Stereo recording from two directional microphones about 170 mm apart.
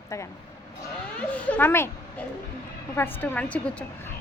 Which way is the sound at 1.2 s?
10° left (ahead or behind).